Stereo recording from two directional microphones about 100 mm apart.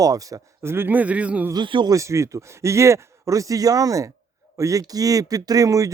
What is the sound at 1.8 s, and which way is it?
Speech, 30° right (ahead or behind).